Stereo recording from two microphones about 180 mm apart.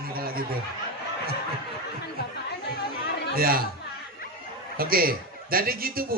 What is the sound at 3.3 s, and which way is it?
Speech, 55° right (ahead or behind).